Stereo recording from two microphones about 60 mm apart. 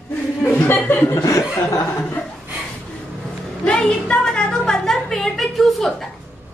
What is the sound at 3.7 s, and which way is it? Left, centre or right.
Speech, centre.